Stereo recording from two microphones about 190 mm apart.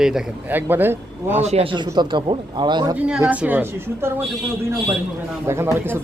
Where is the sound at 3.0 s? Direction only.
5° right (ahead or behind).